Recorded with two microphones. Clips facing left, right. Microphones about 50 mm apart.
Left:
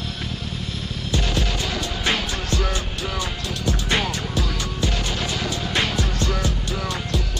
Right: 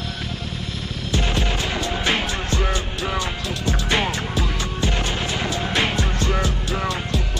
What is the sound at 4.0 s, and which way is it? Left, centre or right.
Music, centre.